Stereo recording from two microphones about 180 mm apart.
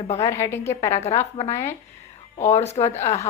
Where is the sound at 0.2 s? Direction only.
15° left (ahead or behind).